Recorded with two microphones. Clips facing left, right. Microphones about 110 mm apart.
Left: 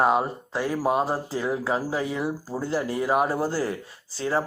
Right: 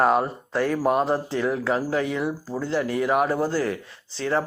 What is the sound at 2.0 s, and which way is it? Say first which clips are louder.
Speech: right 2 dB; 30° left (ahead or behind).